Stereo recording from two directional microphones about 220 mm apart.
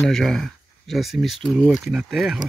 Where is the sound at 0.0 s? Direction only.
Centre (ahead or behind).